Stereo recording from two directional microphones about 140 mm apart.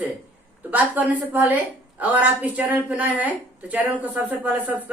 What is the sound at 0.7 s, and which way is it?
Speech, 10° right (ahead or behind).